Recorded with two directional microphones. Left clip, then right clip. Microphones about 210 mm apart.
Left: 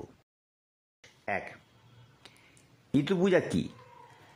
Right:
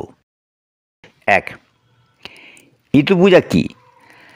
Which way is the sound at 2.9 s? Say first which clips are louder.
Right 16 dB; 30° right (ahead or behind).